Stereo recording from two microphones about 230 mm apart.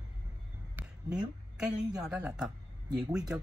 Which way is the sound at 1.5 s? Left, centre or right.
Centre.